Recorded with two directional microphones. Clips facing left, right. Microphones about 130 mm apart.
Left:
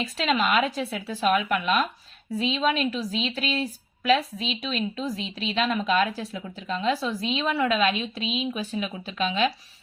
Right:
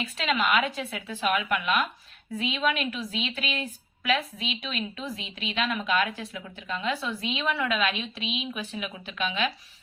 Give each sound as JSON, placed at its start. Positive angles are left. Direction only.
{"t": 0.0, "sound": "a woman's voice", "side_deg": 35}